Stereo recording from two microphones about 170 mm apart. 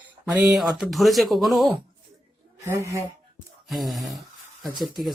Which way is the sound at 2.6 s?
15° right (ahead or behind).